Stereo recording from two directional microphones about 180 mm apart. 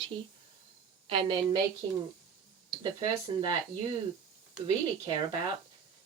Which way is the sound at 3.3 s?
25° right (ahead or behind).